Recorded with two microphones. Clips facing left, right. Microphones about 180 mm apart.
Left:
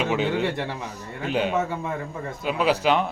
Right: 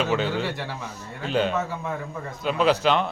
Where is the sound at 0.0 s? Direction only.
10° left (ahead or behind).